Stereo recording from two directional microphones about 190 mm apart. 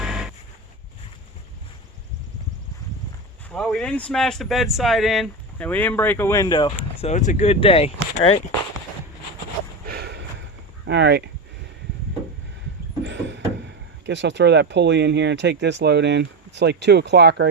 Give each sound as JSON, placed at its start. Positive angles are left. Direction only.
{"t": 0.0, "sound": "a sound", "side_deg": -5}
{"t": 3.5, "sound": "speech", "side_deg": 5}
{"t": 9.8, "sound": "snort", "side_deg": -55}
{"t": 10.8, "sound": "speech", "side_deg": -65}
{"t": 13.1, "sound": "vehicle", "side_deg": -70}
{"t": 14.1, "sound": "speech", "side_deg": -70}